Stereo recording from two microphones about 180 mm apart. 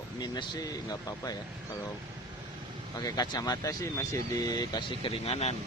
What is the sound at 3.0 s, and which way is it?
Speech, 20° left (ahead or behind).